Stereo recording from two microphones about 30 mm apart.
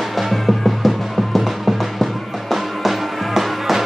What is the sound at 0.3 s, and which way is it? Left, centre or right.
Music, centre.